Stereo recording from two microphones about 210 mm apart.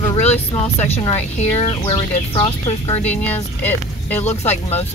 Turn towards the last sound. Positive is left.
turn(degrees=30)  # may be behind; listen again after turning